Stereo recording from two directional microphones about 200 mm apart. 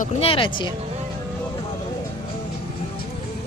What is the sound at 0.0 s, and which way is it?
Speech, 30° left (ahead or behind).